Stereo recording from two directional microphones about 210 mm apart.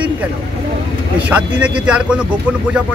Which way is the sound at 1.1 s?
5° right (ahead or behind).